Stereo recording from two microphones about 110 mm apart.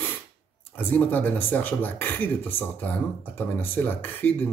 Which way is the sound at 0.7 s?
15° left (ahead or behind).